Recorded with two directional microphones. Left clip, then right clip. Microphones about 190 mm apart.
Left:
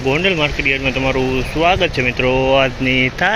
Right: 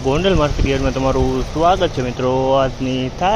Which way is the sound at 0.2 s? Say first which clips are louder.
Left 1 dB; 20° right (ahead or behind).